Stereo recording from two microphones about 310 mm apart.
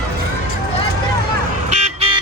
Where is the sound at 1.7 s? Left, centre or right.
Right.